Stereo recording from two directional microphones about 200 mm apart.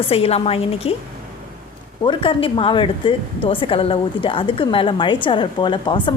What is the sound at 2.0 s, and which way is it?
A woman's voice, 25° left (ahead or behind).